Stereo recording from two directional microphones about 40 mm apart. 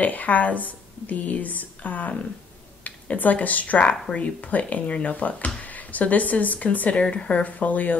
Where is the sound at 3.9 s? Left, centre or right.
Left.